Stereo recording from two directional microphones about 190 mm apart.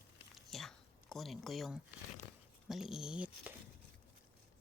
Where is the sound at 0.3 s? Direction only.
Centre (ahead or behind).